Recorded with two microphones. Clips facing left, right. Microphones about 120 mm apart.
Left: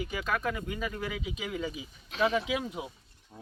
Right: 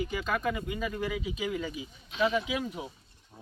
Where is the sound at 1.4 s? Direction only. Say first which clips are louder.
Right 1 dB; 10° left (ahead or behind).